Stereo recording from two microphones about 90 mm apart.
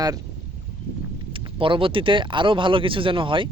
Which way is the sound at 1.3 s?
70° right (ahead or behind).